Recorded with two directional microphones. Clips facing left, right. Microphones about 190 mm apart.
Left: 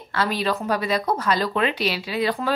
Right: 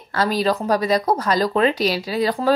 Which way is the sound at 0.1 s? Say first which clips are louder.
Right 4 dB; 40° right (ahead or behind).